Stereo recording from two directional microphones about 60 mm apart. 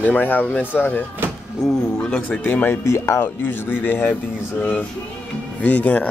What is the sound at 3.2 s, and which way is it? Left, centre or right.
Speech, left.